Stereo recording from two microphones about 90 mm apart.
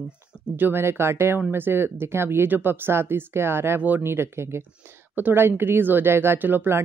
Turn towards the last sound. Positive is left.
turn(degrees=-25)  # may be behind; listen again after turning